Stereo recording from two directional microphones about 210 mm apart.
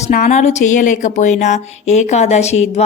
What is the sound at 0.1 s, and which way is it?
Speech, 35° left (ahead or behind).